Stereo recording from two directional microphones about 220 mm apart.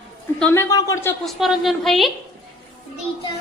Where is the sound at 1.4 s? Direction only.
Centre (ahead or behind).